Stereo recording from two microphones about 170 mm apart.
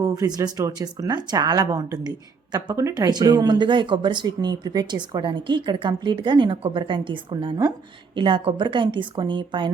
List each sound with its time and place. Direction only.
0.0 s speech: 20° right (ahead or behind)